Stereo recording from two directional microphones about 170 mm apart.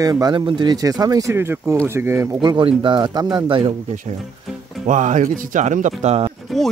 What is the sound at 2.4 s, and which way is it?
Speech, 25° right (ahead or behind).